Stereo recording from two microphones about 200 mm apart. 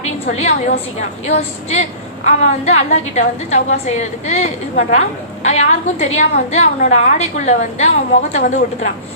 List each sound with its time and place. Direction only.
0.0 s a woman's voice: 35° left (ahead or behind)